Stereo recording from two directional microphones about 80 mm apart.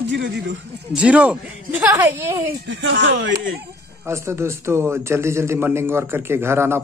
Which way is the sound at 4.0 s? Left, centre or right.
Right.